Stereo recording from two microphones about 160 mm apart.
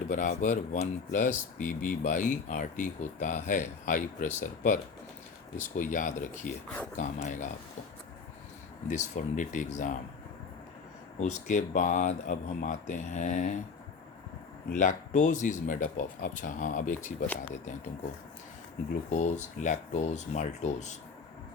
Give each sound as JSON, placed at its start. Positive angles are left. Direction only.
{"t": 0.1, "sound": "speech", "side_deg": 50}
{"t": 8.9, "sound": "speech", "side_deg": 50}
{"t": 11.2, "sound": "speech", "side_deg": 50}
{"t": 14.8, "sound": "speech", "side_deg": 55}
{"t": 19.1, "sound": "speech", "side_deg": 45}